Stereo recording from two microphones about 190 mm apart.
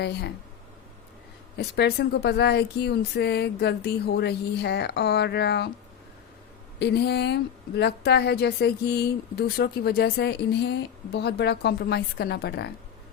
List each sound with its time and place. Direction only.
0.0 s speech: 60° left (ahead or behind)
1.5 s speech: 60° left (ahead or behind)
6.7 s speech: 60° left (ahead or behind)